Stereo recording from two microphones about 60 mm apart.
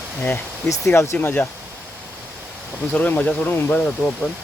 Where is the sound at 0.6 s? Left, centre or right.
Left.